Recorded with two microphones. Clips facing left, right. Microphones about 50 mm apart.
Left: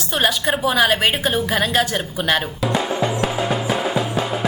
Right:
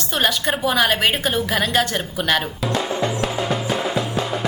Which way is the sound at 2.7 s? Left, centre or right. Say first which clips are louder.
Left 1 dB; centre.